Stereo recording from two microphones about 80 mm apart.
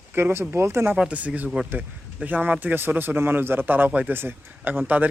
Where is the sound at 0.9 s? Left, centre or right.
Centre.